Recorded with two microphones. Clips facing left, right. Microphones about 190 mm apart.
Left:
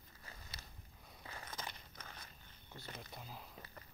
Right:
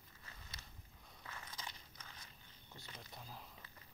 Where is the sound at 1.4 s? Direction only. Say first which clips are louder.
Left 4 dB; 55° left (ahead or behind).